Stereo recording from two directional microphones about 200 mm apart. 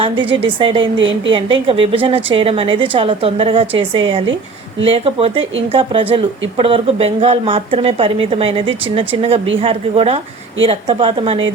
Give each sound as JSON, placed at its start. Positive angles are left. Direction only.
{"t": 0.0, "sound": "a woman's voice", "side_deg": -25}
{"t": 0.9, "sound": "a woman's voice", "side_deg": -70}
{"t": 1.5, "sound": "a woman's voice", "side_deg": -25}